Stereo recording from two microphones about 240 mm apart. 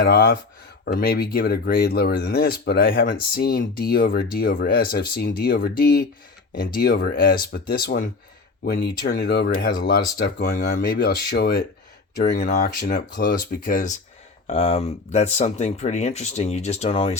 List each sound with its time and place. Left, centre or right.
0.0 s speech: left